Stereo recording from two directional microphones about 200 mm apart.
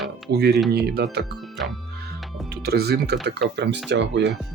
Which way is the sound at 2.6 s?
55° right (ahead or behind).